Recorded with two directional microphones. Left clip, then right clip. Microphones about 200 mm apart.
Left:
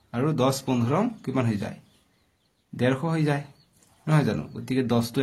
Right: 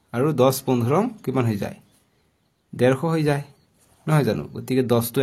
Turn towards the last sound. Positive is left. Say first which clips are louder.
# right 5 dB
turn(degrees=-35)  # may be behind; listen again after turning